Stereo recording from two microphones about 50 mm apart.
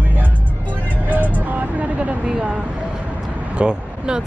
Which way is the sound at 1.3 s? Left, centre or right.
Right.